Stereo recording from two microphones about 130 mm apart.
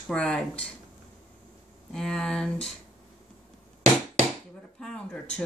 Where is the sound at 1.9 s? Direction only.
5° left (ahead or behind).